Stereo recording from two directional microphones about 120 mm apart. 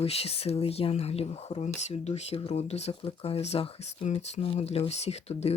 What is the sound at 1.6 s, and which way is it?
Speech, 70° left (ahead or behind).